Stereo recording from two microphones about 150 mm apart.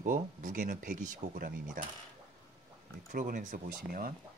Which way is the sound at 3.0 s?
60° right (ahead or behind).